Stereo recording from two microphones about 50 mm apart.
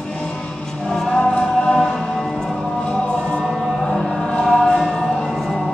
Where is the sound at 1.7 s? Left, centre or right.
Centre.